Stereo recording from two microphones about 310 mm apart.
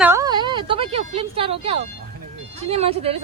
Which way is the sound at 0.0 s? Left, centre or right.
Centre.